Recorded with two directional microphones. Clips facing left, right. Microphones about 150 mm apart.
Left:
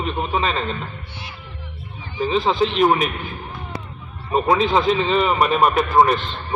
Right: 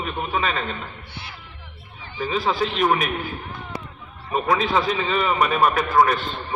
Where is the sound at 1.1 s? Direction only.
15° left (ahead or behind).